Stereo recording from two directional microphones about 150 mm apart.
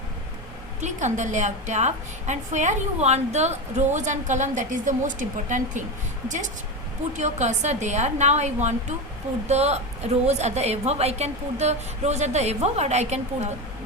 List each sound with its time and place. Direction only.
0.8 s a woman's voice: 50° right (ahead or behind)